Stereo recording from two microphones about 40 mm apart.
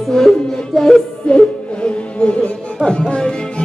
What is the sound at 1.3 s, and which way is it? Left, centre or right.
Music, left.